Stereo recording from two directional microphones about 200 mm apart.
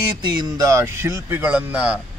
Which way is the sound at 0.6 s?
15° right (ahead or behind).